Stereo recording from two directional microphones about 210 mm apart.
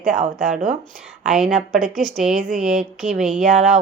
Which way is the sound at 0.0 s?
40° right (ahead or behind).